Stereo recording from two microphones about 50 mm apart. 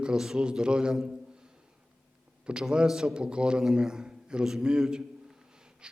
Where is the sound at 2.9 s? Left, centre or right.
Centre.